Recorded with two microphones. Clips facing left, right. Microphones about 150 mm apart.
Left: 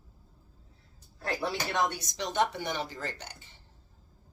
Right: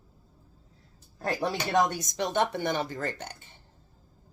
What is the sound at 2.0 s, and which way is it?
A woman's voice, 55° right (ahead or behind).